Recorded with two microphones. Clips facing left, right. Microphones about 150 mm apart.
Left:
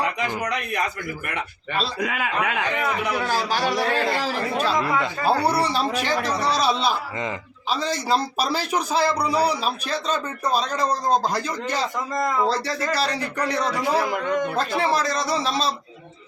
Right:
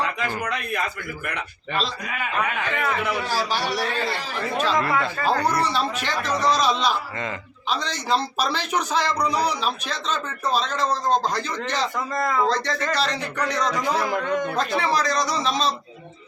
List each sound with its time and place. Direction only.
0.0 s speech: 15° left (ahead or behind)
2.0 s a man's voice: 90° left
2.7 s speech: 15° left (ahead or behind)
3.8 s a man's voice: 90° left
4.5 s speech: 10° left (ahead or behind)
6.2 s speech: 30° left (ahead or behind)
6.5 s speech: 10° left (ahead or behind)
8.4 s speech: 35° left (ahead or behind)
9.0 s speech: 10° left (ahead or behind)